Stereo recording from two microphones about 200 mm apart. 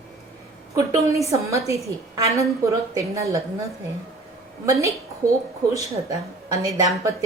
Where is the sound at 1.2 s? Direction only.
15° right (ahead or behind).